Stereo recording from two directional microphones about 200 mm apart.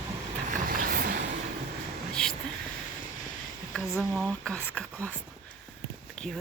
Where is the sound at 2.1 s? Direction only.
5° left (ahead or behind).